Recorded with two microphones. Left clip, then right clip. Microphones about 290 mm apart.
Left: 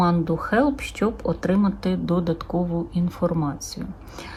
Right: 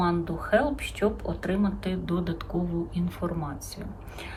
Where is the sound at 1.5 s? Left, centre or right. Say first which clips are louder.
Left 4 dB; centre.